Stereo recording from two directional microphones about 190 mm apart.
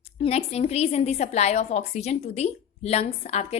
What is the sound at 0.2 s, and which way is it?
A woman's voice, 35° left (ahead or behind).